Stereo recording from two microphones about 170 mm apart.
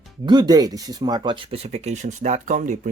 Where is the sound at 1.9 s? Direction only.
45° right (ahead or behind).